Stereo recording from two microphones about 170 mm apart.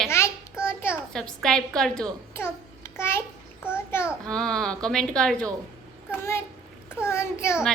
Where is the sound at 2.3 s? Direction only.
15° left (ahead or behind).